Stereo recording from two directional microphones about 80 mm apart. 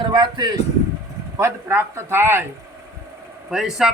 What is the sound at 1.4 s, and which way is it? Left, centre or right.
Speech, right.